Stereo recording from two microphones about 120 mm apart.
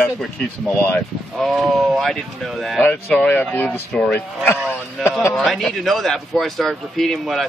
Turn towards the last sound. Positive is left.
turn(degrees=0)  # may be behind; listen again after turning